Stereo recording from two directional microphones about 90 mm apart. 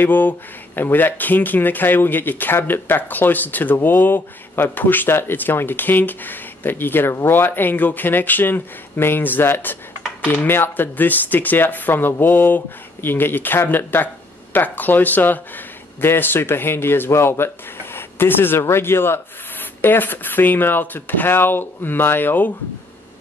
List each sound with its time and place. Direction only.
0.0 s speech: 20° left (ahead or behind)